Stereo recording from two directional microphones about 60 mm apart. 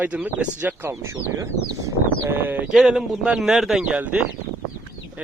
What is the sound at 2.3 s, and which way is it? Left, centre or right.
Speech, right.